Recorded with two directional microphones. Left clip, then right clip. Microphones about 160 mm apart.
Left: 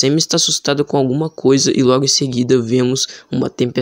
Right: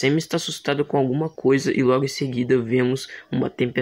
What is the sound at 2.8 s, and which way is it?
Speech, 20° left (ahead or behind).